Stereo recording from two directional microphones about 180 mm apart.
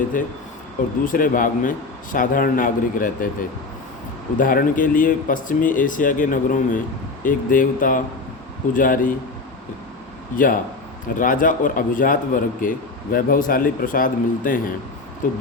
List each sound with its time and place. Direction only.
0.1 s speech: 50° left (ahead or behind)
4.4 s speech: 50° left (ahead or behind)
10.3 s speech: 50° left (ahead or behind)